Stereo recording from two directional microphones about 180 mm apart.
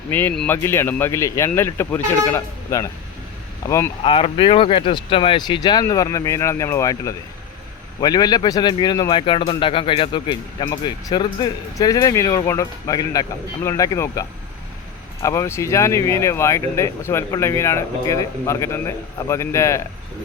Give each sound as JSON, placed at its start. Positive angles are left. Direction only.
{"t": 0.1, "sound": "speech", "side_deg": 10}
{"t": 4.0, "sound": "speech", "side_deg": 30}